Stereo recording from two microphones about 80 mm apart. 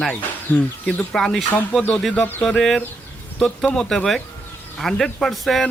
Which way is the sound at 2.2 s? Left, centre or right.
Left.